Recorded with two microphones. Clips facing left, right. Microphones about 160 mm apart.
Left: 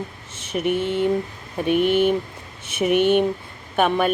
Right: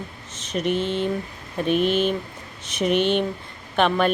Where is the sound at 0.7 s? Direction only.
55° left (ahead or behind).